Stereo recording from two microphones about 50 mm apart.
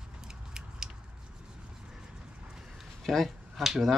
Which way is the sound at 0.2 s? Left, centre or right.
Centre.